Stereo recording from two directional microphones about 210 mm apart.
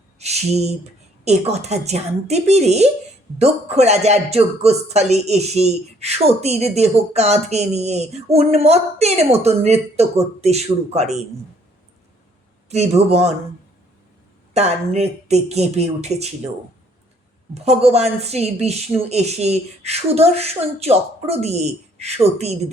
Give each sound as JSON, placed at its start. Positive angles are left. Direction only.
{"t": 0.2, "sound": "a man's voice", "side_deg": -30}
{"t": 12.6, "sound": "a man's voice", "side_deg": -30}
{"t": 14.5, "sound": "a man's voice", "side_deg": -30}
{"t": 17.5, "sound": "a man's voice", "side_deg": -30}